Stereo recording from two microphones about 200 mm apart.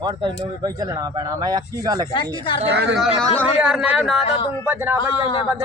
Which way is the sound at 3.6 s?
5° right (ahead or behind).